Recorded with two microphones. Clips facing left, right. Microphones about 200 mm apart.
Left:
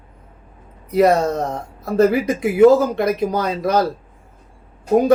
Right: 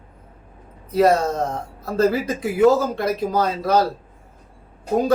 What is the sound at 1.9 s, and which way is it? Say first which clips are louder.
Speech: left 4 dB; 15° left (ahead or behind).